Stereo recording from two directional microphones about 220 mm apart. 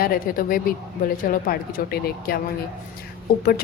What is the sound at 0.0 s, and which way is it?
A woman's voice, 40° left (ahead or behind).